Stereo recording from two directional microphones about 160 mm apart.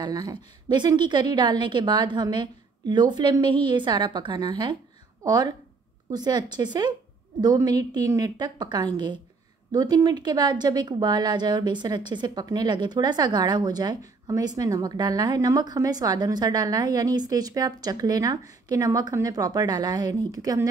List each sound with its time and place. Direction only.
0.0 s a woman's voice: 25° right (ahead or behind)